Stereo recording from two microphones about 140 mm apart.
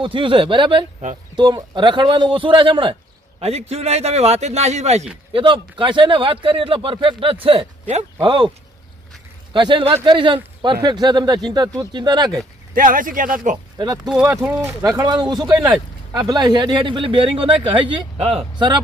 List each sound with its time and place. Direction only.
0.0 s speech: 35° right (ahead or behind)
3.4 s a man's voice: 45° right (ahead or behind)
5.3 s speech: 35° right (ahead or behind)
9.5 s speech: 35° right (ahead or behind)
12.7 s speech: 80° right
13.7 s speech: 30° right (ahead or behind)
14.0 s speech: 5° right (ahead or behind); by 15.4 s 30° right (ahead or behind)
15.4 s speech: 5° right (ahead or behind)
16.1 s speech: 30° right (ahead or behind); by 18.4 s 45° right (ahead or behind)